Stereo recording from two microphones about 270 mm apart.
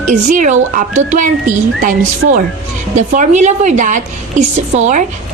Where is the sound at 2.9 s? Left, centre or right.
Right.